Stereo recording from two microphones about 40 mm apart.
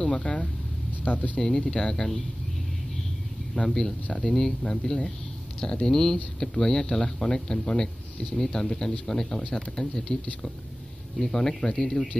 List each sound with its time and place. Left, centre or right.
0.0 s speech: left
1.0 s speech: left
1.4 s speech: centre
3.6 s speech: centre
11.1 s speech: centre